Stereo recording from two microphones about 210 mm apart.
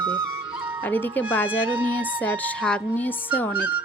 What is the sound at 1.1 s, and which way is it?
Music, 10° left (ahead or behind).